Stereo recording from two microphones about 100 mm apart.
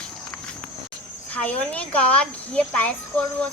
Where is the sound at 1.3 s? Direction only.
15° left (ahead or behind).